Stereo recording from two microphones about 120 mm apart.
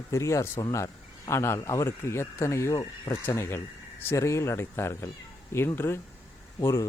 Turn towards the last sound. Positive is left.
turn(degrees=25)  # may be behind; listen again after turning